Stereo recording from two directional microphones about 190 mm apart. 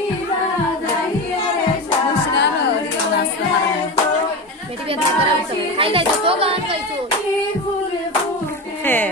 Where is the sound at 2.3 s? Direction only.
65° left (ahead or behind).